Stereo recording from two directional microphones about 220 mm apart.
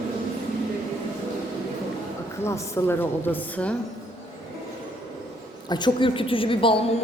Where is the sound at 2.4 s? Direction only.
10° left (ahead or behind).